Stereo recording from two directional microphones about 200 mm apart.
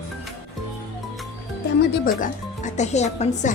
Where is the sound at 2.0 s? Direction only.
40° left (ahead or behind).